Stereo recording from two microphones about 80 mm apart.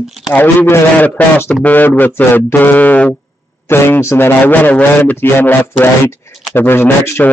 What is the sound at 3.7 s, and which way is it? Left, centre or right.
A man's voice, left.